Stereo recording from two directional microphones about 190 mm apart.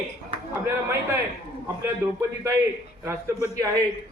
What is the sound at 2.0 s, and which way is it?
A man's voice, 15° right (ahead or behind).